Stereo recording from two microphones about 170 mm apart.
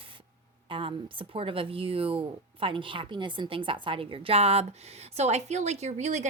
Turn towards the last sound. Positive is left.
turn(degrees=-45)  # may be behind; listen again after turning